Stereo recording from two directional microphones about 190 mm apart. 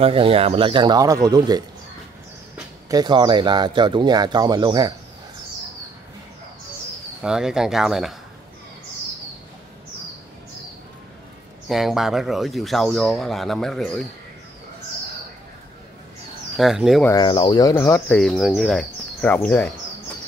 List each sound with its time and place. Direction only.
0.0 s speech: 30° right (ahead or behind)
2.9 s speech: 20° right (ahead or behind)
7.2 s speech: 5° right (ahead or behind)
11.7 s speech: centre (ahead or behind)
16.5 s speech: centre (ahead or behind)
17.2 s speech: 25° left (ahead or behind)
18.1 s speech: 5° left (ahead or behind)